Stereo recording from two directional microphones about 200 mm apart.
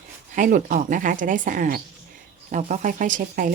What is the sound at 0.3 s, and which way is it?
Speech, 40° right (ahead or behind).